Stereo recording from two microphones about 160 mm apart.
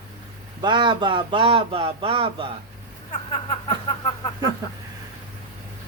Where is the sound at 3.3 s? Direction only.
35° left (ahead or behind).